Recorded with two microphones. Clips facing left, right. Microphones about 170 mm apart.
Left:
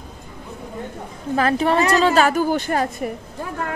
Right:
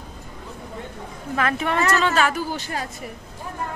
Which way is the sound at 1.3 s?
35° left (ahead or behind).